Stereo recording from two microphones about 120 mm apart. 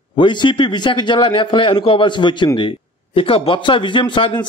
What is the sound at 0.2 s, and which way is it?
A man's voice, 40° left (ahead or behind).